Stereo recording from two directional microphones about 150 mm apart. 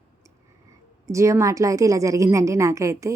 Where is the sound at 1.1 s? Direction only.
20° right (ahead or behind).